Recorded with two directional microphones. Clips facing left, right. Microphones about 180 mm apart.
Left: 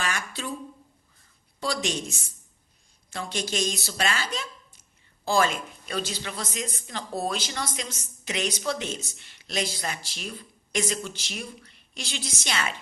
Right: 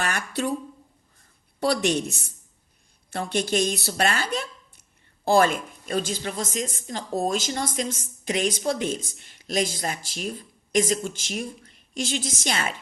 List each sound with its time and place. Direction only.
0.0 s speech: 60° right (ahead or behind)
1.5 s a woman's voice: 60° right (ahead or behind); by 12.7 s 45° right (ahead or behind)